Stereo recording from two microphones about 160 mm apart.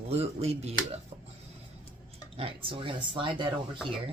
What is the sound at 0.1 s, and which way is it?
Speech, 40° right (ahead or behind).